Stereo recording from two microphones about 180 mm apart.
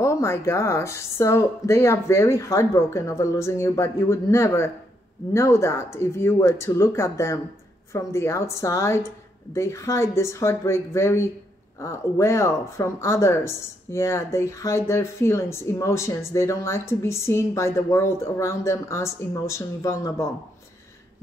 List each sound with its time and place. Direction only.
0.0 s speech: 15° left (ahead or behind)